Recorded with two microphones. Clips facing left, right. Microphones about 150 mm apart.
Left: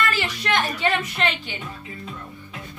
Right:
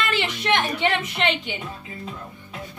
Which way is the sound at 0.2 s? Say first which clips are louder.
Right 1 dB; 20° right (ahead or behind).